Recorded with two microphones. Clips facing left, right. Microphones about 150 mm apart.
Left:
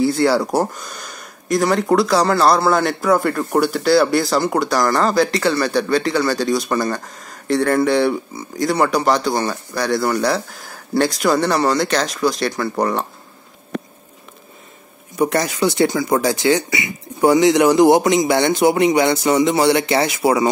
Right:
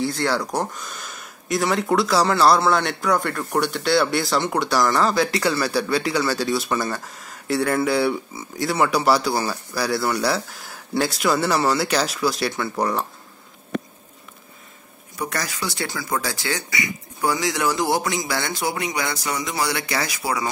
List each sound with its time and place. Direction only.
0.0 s speech: 5° left (ahead or behind)
15.1 s speech: 25° left (ahead or behind)